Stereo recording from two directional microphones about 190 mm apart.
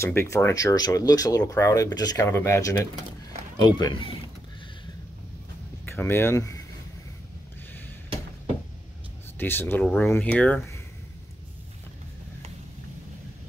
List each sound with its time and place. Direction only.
0.0 s a man's voice: 15° left (ahead or behind)
5.9 s speech: 10° left (ahead or behind)
9.4 s speech: 10° left (ahead or behind)